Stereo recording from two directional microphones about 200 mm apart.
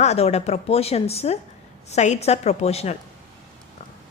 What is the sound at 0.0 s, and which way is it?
Speech, 30° left (ahead or behind).